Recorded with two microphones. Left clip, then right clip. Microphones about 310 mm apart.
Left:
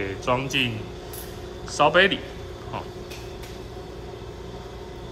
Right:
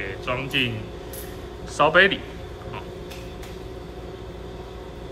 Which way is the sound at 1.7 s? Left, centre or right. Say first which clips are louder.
Right 1 dB; centre.